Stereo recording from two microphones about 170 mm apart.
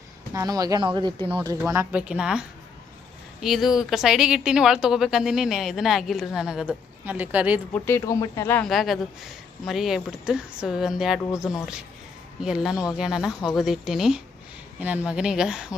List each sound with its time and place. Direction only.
0.3 s speech: 20° right (ahead or behind)
1.5 s speech: 15° right (ahead or behind)
3.4 s speech: centre (ahead or behind)
7.7 s speech: 15° left (ahead or behind)
8.6 s speech: centre (ahead or behind)